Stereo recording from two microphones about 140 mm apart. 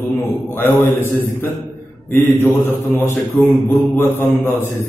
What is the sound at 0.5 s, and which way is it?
Mantra, 15° left (ahead or behind).